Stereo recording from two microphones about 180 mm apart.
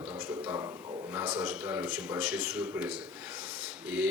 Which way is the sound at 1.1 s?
10° right (ahead or behind).